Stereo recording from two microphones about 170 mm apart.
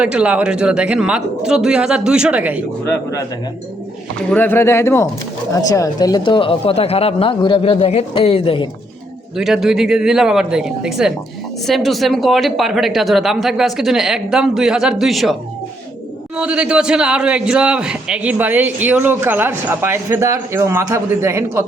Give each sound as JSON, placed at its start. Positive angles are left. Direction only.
{"t": 0.0, "sound": "speech", "side_deg": -5}
{"t": 2.8, "sound": "speech", "side_deg": 15}
{"t": 4.3, "sound": "speech", "side_deg": 10}
{"t": 9.4, "sound": "speech", "side_deg": 0}
{"t": 16.4, "sound": "a man's voice", "side_deg": -5}